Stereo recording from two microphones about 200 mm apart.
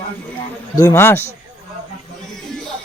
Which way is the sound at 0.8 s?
15° left (ahead or behind).